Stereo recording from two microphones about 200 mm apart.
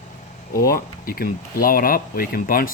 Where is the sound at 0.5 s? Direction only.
45° left (ahead or behind).